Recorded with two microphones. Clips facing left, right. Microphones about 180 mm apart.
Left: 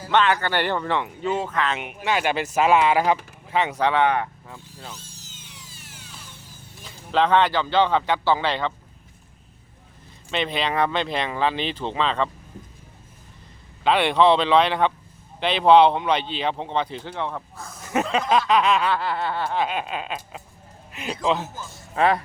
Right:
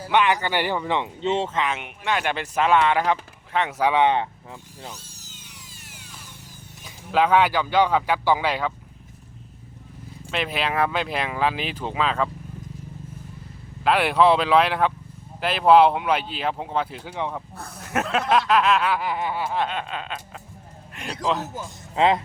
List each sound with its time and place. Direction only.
0.1 s speech: 15° right (ahead or behind)
1.7 s speech: 5° left (ahead or behind); by 4.9 s 15° right (ahead or behind)
6.8 s speech: 10° right (ahead or behind)
10.3 s speech: 5° right (ahead or behind)
13.8 s speech: 5° right (ahead or behind)
17.8 s speech: centre (ahead or behind)
18.9 s speech: 15° right (ahead or behind)
19.5 s a sound: 10° left (ahead or behind)
20.9 s speech: centre (ahead or behind)
21.9 s speech: 20° right (ahead or behind)